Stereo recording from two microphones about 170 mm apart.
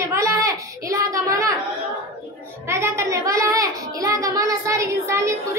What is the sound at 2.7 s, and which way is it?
A child's voice, 15° right (ahead or behind).